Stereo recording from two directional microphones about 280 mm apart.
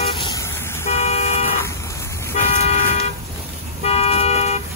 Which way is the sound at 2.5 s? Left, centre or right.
Left.